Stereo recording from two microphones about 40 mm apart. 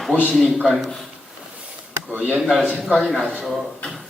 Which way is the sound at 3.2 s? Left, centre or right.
Right.